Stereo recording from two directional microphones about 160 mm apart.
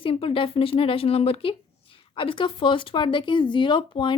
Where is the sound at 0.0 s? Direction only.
35° left (ahead or behind).